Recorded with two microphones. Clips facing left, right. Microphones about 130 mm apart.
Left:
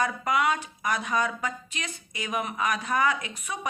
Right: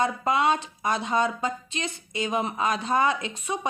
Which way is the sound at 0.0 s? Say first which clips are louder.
Right 2 dB; 25° right (ahead or behind).